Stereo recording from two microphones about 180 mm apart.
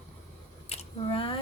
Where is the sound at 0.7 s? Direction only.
30° left (ahead or behind).